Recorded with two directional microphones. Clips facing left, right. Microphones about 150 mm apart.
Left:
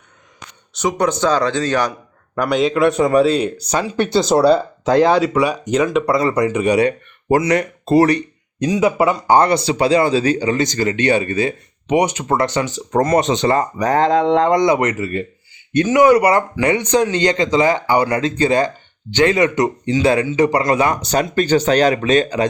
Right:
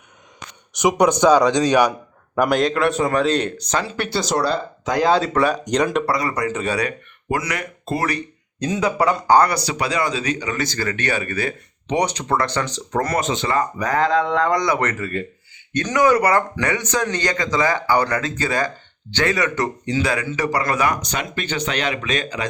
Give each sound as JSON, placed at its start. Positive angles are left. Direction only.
{"t": 0.7, "sound": "speech", "side_deg": -15}
{"t": 5.2, "sound": "speech", "side_deg": 10}
{"t": 6.1, "sound": "speech", "side_deg": 25}
{"t": 6.7, "sound": "speech", "side_deg": 30}
{"t": 9.3, "sound": "speech", "side_deg": 25}
{"t": 11.9, "sound": "speech", "side_deg": 10}
{"t": 12.9, "sound": "speech", "side_deg": 25}